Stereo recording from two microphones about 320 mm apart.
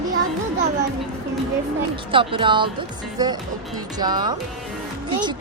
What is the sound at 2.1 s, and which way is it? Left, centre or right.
Speech, centre.